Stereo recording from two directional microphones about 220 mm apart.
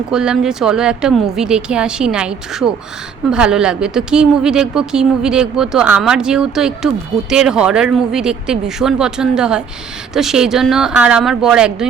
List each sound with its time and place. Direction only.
0.1 s a woman's voice: 5° right (ahead or behind)